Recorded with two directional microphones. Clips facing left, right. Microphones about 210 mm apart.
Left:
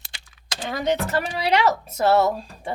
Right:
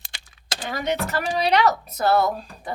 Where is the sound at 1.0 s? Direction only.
30° left (ahead or behind).